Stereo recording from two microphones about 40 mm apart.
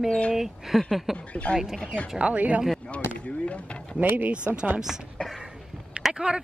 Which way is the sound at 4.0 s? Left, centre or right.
Right.